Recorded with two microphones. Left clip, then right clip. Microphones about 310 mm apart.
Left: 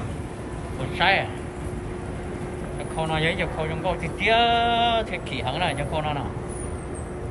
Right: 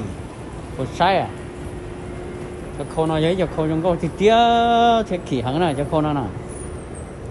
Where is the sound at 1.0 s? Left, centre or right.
Centre.